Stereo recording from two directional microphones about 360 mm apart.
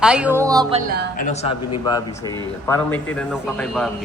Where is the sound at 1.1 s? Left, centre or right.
Left.